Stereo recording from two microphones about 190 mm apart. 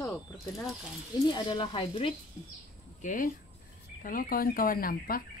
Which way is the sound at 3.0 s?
45° left (ahead or behind).